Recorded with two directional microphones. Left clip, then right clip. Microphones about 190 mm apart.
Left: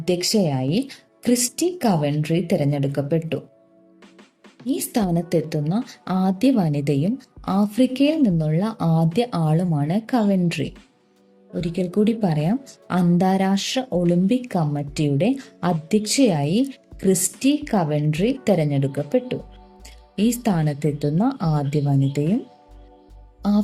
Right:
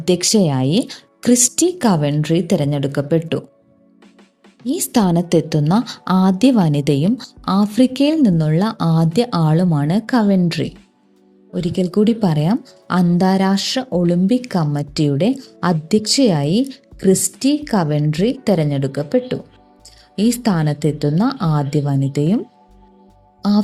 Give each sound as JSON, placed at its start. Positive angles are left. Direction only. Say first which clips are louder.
{"t": 0.0, "sound": "speech", "louder": "right 5 dB", "side_deg": -40}
{"t": 4.6, "sound": "speech", "louder": "right 6 dB", "side_deg": -35}
{"t": 23.4, "sound": "speech", "louder": "right 4 dB", "side_deg": -35}